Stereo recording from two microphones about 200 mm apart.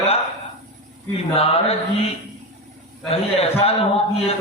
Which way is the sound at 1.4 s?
30° left (ahead or behind).